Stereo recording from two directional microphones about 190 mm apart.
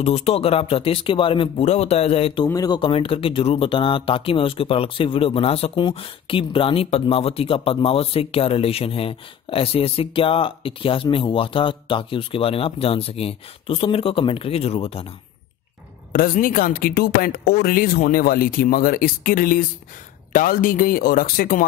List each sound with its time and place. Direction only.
0.0 s speech: 30° left (ahead or behind)
16.1 s speech: 50° left (ahead or behind)